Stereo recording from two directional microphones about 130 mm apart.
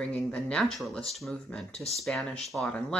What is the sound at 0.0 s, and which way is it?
Speech, 5° left (ahead or behind).